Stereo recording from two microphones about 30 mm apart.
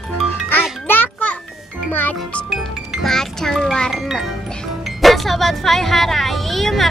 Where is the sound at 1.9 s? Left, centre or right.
Left.